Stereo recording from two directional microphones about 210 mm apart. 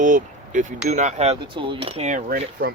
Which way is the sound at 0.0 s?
40° right (ahead or behind).